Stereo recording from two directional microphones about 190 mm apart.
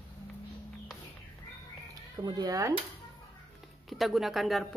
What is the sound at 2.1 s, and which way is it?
Speech, 20° right (ahead or behind).